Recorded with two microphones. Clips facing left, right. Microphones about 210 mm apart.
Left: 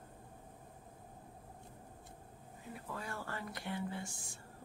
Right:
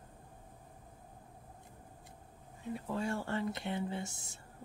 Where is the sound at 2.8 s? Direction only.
25° right (ahead or behind).